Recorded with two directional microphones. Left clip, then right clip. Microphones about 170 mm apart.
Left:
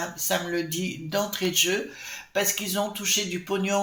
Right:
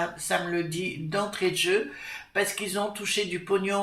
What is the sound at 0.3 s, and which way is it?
Speech, 45° left (ahead or behind).